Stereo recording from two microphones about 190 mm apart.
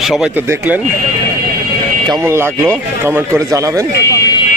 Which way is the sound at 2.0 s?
15° right (ahead or behind).